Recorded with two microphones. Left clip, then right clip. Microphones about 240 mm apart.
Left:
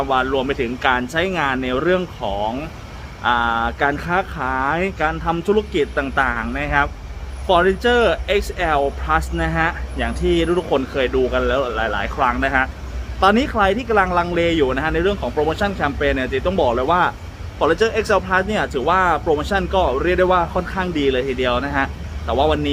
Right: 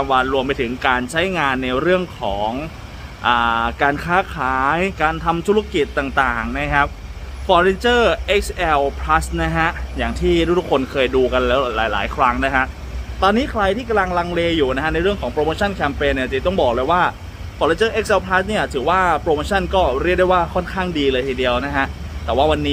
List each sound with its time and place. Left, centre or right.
0.0 s speech: centre
13.1 s speech: centre